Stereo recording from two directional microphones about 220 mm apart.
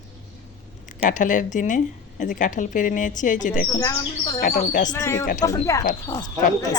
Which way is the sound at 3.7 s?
15° left (ahead or behind).